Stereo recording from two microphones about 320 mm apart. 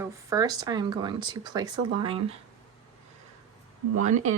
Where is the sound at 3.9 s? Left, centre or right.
Right.